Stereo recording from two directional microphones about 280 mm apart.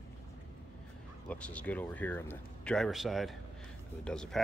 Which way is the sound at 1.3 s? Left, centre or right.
Centre.